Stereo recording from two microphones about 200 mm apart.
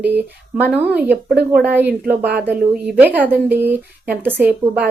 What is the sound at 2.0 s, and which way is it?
Speech, 55° right (ahead or behind).